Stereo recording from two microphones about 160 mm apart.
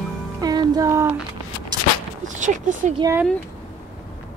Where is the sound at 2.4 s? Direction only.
50° right (ahead or behind).